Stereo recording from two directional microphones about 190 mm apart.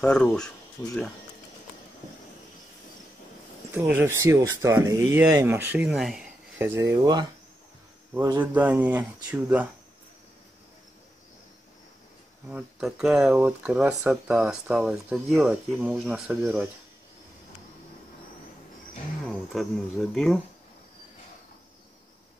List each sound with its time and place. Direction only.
0.0 s speech: 5° left (ahead or behind)
3.7 s speech: 10° right (ahead or behind)
6.7 s speech: 15° right (ahead or behind)
12.4 s speech: 5° right (ahead or behind)
19.5 s speech: centre (ahead or behind)